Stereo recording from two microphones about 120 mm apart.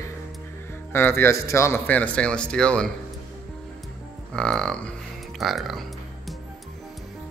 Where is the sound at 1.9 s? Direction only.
10° left (ahead or behind).